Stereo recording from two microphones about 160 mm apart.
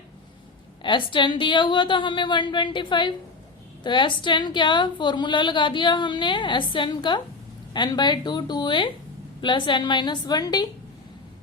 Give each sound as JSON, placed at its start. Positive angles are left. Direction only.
{"t": 0.8, "sound": "a woman's voice", "side_deg": 30}